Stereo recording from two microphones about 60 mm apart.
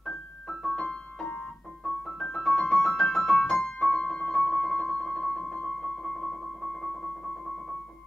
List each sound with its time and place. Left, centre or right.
0.0 s keyboard: centre
0.7 s piano: centre
2.0 s keyboard: centre
4.5 s music: centre
5.5 s keyboard: centre